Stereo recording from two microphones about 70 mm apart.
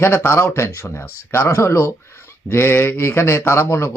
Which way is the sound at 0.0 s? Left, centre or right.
Left.